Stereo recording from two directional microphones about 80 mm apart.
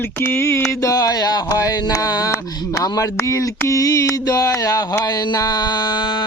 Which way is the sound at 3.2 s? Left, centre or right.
Left.